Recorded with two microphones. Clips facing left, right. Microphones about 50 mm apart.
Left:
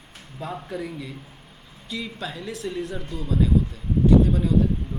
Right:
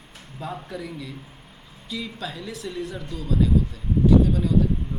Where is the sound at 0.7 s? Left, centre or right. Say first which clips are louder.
Left 2 dB; centre.